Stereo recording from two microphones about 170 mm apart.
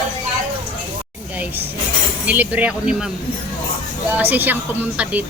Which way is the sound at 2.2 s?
10° right (ahead or behind).